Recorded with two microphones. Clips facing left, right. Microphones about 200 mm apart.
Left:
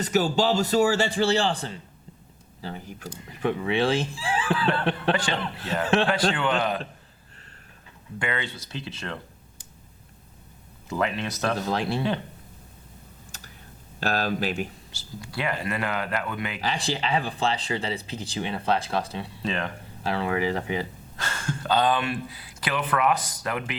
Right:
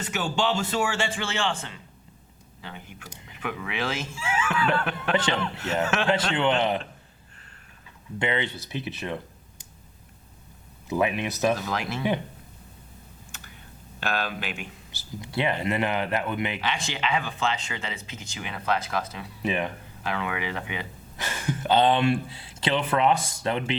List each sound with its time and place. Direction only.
0.0 s speech: 35° left (ahead or behind)
6.3 s speech: 20° right (ahead or behind)
8.2 s speech: 20° right (ahead or behind)
10.8 s speech: 15° right (ahead or behind)
11.6 s speech: 30° left (ahead or behind)
13.3 s computer keyboard: 35° left (ahead or behind)
14.0 s speech: 35° left (ahead or behind)
15.2 s speech: 20° right (ahead or behind)
16.6 s speech: 35° left (ahead or behind)
19.4 s speech: 15° right (ahead or behind)
20.1 s speech: 35° left (ahead or behind)
21.2 s speech: 15° right (ahead or behind)